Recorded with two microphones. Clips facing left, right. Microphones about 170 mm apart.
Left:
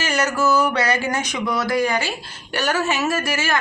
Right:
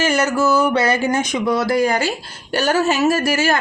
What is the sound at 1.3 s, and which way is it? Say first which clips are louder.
Speech: right 4 dB; 30° right (ahead or behind).